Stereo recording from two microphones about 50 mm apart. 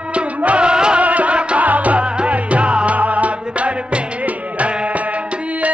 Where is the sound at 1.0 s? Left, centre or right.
Right.